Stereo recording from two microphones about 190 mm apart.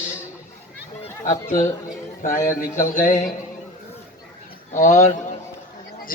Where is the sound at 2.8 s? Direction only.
40° left (ahead or behind).